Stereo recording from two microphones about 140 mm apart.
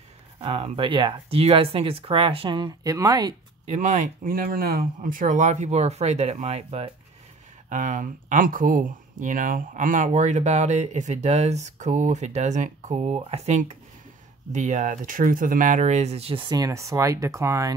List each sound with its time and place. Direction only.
0.4 s speech: 45° right (ahead or behind); by 3.3 s 25° right (ahead or behind)
3.6 s speech: 55° right (ahead or behind)
7.7 s speech: 70° right (ahead or behind); by 17.7 s 20° right (ahead or behind)